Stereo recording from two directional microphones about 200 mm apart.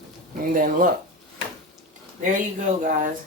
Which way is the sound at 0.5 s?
45° right (ahead or behind).